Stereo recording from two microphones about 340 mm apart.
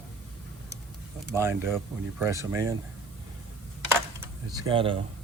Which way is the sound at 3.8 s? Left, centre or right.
Centre.